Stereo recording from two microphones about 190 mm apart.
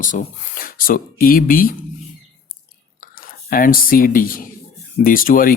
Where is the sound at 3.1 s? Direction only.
50° left (ahead or behind).